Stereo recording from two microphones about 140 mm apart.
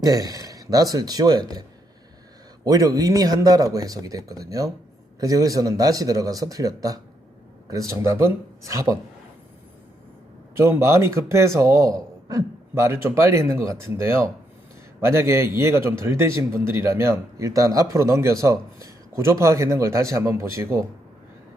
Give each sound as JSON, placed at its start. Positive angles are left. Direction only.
{"t": 0.0, "sound": "speech", "side_deg": -25}
{"t": 2.6, "sound": "a man's voice", "side_deg": -25}
{"t": 10.5, "sound": "a man's voice", "side_deg": -20}